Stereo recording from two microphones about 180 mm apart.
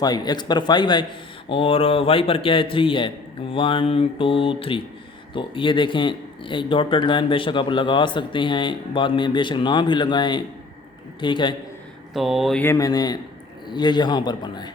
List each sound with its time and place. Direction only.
0.0 s a man's voice: 20° left (ahead or behind)
12.1 s mantra: centre (ahead or behind)
12.6 s speech: 20° left (ahead or behind)